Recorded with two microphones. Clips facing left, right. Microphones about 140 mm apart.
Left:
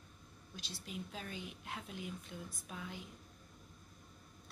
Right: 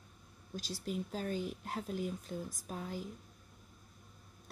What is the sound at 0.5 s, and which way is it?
A woman's voice, 45° right (ahead or behind).